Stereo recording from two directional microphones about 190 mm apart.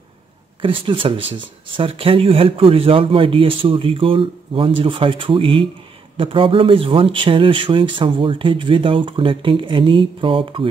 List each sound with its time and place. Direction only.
0.6 s speech: 25° right (ahead or behind)